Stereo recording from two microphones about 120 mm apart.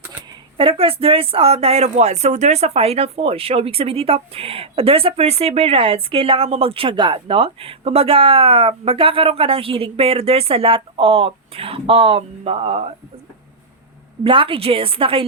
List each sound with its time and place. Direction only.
0.5 s speech: 50° right (ahead or behind)
14.3 s speech: 45° right (ahead or behind)